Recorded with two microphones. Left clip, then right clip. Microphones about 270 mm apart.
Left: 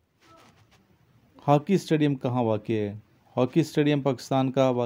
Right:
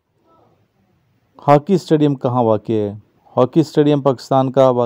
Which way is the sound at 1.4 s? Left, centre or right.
Right.